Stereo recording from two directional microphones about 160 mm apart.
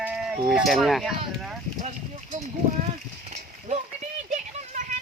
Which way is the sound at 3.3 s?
45° right (ahead or behind).